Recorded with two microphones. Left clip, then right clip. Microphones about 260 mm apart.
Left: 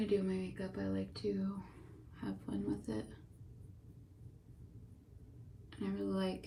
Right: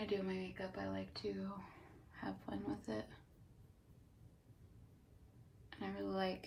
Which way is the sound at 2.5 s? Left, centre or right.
Right.